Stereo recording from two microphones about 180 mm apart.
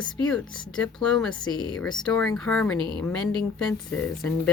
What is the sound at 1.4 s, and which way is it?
Speech, 25° left (ahead or behind).